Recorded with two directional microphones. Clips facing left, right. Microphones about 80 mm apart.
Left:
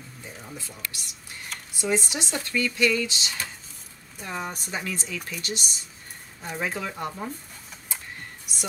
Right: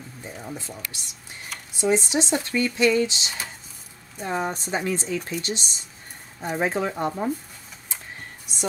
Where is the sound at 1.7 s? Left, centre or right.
Right.